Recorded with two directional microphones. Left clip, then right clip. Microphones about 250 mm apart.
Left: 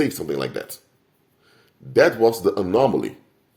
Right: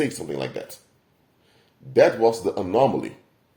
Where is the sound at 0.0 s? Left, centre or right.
Left.